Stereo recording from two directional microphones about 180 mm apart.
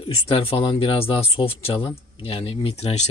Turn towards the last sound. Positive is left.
turn(degrees=35)  # may be behind; listen again after turning